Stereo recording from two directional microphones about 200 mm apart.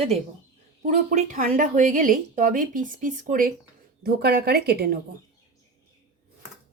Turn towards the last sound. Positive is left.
turn(degrees=-50)  # may be behind; listen again after turning